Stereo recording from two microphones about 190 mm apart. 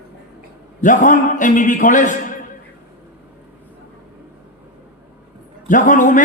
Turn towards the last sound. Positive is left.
turn(degrees=45)  # may be behind; listen again after turning